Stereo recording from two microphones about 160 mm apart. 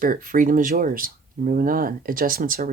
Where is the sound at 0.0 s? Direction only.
60° right (ahead or behind).